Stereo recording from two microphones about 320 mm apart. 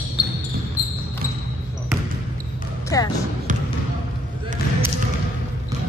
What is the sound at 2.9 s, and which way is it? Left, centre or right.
Speech, centre.